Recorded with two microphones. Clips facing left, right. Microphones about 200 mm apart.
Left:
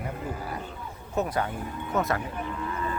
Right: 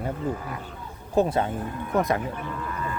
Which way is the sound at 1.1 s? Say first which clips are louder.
Right 5 dB; 30° right (ahead or behind).